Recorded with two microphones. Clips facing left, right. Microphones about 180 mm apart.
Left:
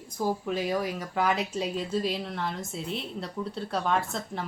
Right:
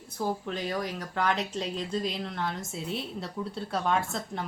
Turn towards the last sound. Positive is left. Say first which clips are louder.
# left 1 dB
turn(degrees=0)  # may be behind; listen again after turning